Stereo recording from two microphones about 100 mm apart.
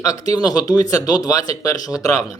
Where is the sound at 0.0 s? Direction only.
35° left (ahead or behind).